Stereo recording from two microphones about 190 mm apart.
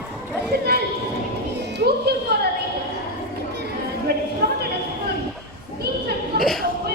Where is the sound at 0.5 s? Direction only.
55° right (ahead or behind).